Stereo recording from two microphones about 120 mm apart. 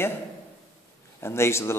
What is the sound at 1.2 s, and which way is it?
Speech, 20° left (ahead or behind).